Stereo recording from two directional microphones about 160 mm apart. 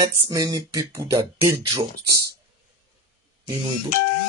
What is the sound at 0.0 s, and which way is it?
Speech, 20° right (ahead or behind).